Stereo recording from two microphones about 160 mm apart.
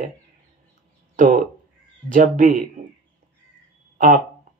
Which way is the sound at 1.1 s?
55° right (ahead or behind).